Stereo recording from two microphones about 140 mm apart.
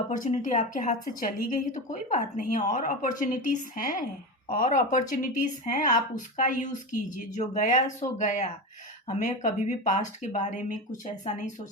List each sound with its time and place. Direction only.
0.2 s speech: 60° left (ahead or behind)